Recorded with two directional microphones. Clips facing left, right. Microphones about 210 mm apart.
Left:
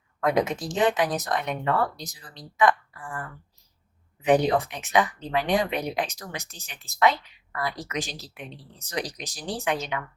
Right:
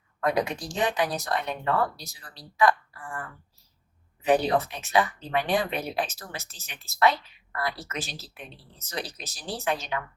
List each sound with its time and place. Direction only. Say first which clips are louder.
0.2 s speech: left 3 dB; 20° left (ahead or behind)
4.3 s speech: left 2 dB; 15° left (ahead or behind)